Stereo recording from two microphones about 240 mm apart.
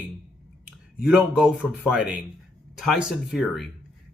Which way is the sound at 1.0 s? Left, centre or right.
Centre.